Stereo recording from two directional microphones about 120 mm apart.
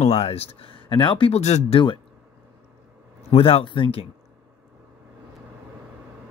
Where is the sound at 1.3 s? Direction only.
65° left (ahead or behind).